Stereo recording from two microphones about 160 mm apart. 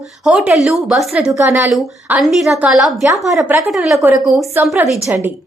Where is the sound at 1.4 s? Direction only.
20° right (ahead or behind).